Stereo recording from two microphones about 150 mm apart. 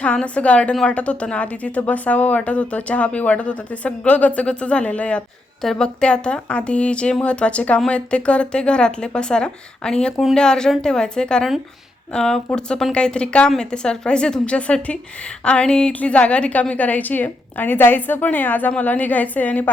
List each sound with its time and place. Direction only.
0.0 s a woman's voice: 10° left (ahead or behind)